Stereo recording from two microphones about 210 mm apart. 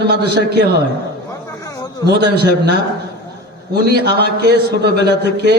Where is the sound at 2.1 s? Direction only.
50° right (ahead or behind).